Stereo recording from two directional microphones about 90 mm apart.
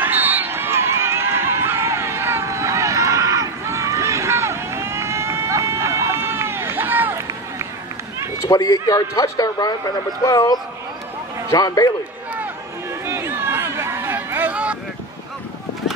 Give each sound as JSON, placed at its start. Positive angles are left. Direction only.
{"t": 0.0, "sound": "run", "side_deg": -20}
{"t": 8.5, "sound": "a man's voice", "side_deg": 45}
{"t": 11.5, "sound": "a man's voice", "side_deg": 45}
{"t": 13.0, "sound": "hubbub", "side_deg": -30}